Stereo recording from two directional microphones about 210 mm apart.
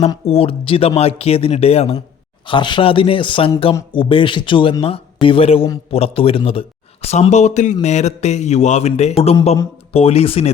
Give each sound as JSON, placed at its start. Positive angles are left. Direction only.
{"t": 0.1, "sound": "speech", "side_deg": 25}